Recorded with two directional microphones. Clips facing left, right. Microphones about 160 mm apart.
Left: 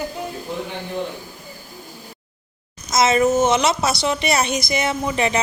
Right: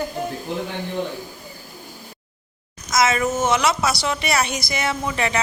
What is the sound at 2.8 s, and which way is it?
A woman's voice, 25° left (ahead or behind).